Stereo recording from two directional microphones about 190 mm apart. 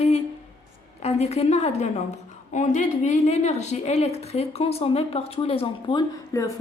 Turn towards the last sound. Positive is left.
turn(degrees=20)  # may be behind; listen again after turning